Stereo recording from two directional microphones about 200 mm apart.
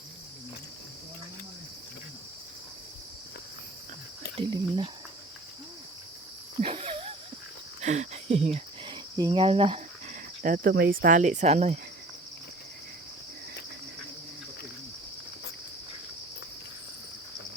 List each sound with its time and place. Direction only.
4.4 s speech: 25° right (ahead or behind)
6.6 s wheeze: 30° right (ahead or behind)
7.8 s a sound: 35° right (ahead or behind)
10.4 s speech: 45° right (ahead or behind)